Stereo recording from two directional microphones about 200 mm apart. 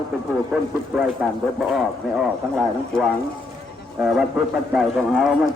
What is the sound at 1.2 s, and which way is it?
Speech, centre (ahead or behind).